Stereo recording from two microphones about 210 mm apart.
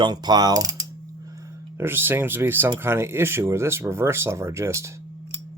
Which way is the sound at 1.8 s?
10° right (ahead or behind).